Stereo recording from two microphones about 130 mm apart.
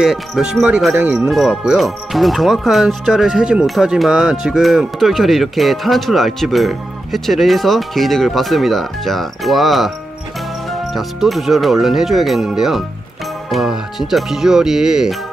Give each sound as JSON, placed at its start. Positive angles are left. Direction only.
{"t": 0.0, "sound": "speech", "side_deg": 0}
{"t": 0.9, "sound": "speech", "side_deg": -15}
{"t": 1.3, "sound": "speech", "side_deg": 0}